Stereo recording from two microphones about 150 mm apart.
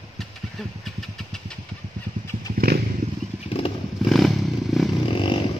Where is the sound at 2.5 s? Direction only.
90° right.